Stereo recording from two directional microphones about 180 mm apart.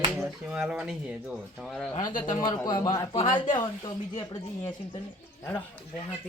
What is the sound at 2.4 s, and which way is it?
A man's voice, 20° left (ahead or behind).